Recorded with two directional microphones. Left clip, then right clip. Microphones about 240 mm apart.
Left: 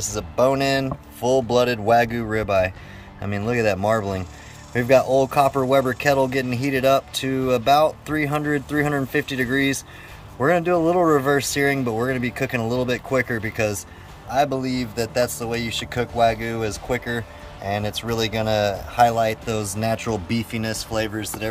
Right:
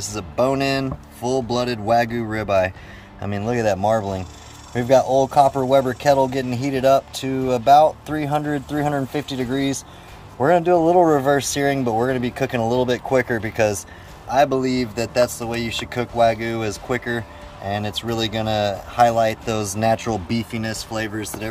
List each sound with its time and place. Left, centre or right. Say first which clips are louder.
0.0 s speech: left 1 dB; centre